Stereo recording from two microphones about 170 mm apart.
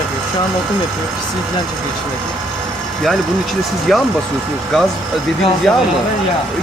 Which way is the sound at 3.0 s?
Centre (ahead or behind).